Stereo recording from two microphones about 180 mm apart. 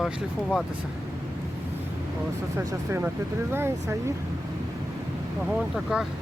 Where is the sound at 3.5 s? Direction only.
15° right (ahead or behind).